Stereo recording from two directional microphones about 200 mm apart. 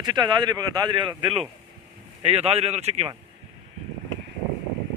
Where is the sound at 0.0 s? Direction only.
20° right (ahead or behind).